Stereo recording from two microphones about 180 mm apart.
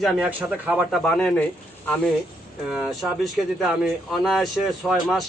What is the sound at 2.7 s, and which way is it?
Speech, centre (ahead or behind).